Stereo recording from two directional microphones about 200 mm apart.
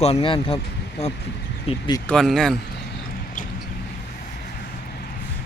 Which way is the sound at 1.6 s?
25° left (ahead or behind).